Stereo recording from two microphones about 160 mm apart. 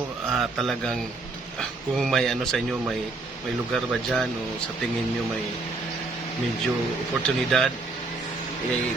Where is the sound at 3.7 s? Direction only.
Centre (ahead or behind).